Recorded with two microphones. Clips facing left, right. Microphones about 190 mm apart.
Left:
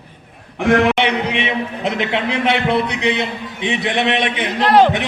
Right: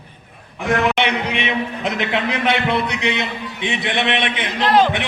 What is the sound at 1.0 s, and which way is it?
Speech, 30° left (ahead or behind).